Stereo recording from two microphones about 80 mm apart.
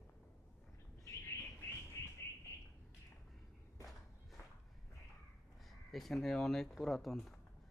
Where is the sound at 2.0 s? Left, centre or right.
Left.